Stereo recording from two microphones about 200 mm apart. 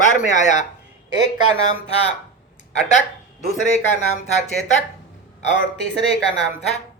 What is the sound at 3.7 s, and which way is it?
Speech, 35° left (ahead or behind).